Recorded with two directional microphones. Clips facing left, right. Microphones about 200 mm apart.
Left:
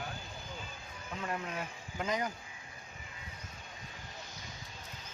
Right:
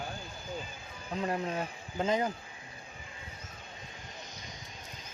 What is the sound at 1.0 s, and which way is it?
Speech, 30° right (ahead or behind).